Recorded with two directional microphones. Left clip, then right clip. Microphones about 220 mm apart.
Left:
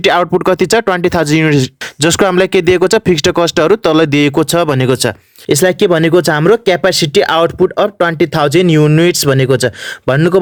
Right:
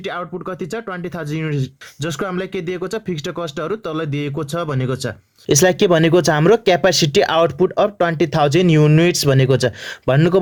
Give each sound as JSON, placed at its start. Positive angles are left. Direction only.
{"t": 0.0, "sound": "speech", "side_deg": 45}
{"t": 5.5, "sound": "speech", "side_deg": 10}